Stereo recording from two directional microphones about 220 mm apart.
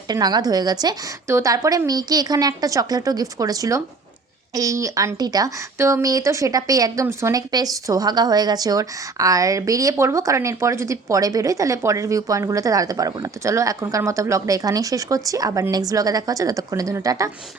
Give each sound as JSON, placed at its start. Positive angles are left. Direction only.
{"t": 0.1, "sound": "speech", "side_deg": -20}